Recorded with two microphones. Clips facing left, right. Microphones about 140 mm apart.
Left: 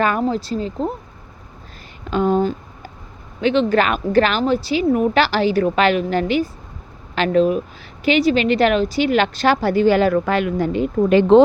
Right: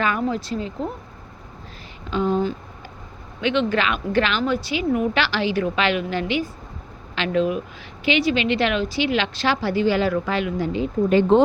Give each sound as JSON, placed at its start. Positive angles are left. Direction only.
{"t": 0.0, "sound": "a woman's voice", "side_deg": 45}
{"t": 2.0, "sound": "a woman's voice", "side_deg": 50}
{"t": 3.4, "sound": "a woman's voice", "side_deg": 40}
{"t": 11.1, "sound": "speech", "side_deg": 90}